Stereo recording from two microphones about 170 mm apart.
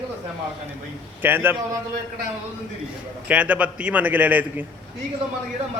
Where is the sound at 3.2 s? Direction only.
10° right (ahead or behind).